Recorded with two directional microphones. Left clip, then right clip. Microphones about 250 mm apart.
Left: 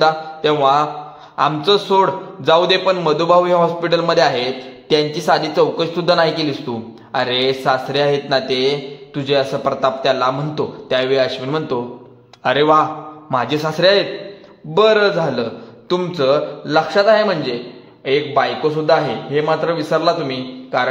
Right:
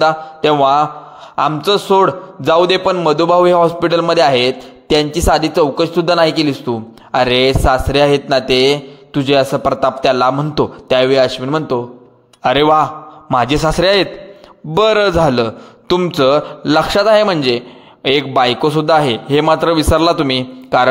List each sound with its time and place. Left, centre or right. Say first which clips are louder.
0.0 s a man's voice: right 2 dB; right